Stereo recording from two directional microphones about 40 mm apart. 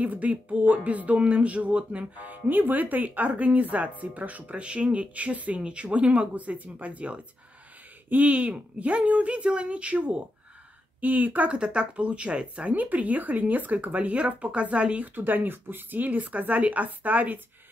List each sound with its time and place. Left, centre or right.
0.0 s speech: right
5.6 s speech: right
11.6 s speech: right
15.0 s speech: right